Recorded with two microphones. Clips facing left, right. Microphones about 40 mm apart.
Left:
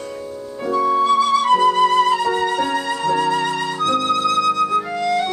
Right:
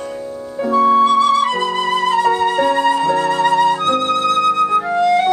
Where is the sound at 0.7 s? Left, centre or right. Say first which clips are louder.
Right 4 dB; right.